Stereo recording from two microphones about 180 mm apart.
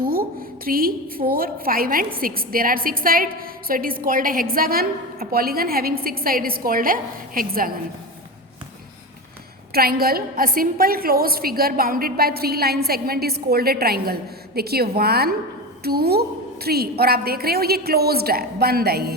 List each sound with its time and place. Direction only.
0.0 s a woman's voice: 55° right (ahead or behind)
9.7 s a woman's voice: 55° right (ahead or behind)